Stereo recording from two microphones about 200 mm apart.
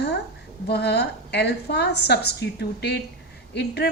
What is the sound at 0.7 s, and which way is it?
A woman's voice, 55° left (ahead or behind).